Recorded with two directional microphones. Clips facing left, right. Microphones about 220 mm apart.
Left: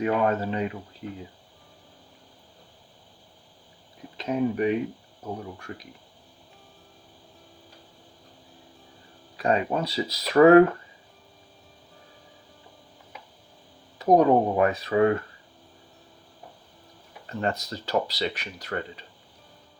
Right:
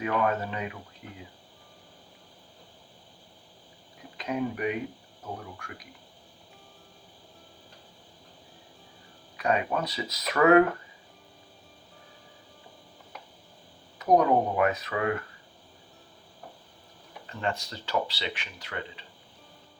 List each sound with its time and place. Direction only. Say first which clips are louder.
0.0 s speech: left 4 dB; 30° left (ahead or behind)
4.2 s speech: left 5 dB; 30° left (ahead or behind)
9.4 s speech: left 3 dB; 30° left (ahead or behind)
14.0 s speech: left 4 dB; 30° left (ahead or behind)
17.2 s speech: left 4 dB; 40° left (ahead or behind)